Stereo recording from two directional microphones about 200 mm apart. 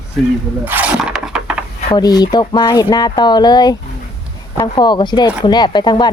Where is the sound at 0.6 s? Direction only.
10° right (ahead or behind).